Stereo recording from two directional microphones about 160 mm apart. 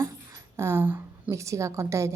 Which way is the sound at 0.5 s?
15° right (ahead or behind).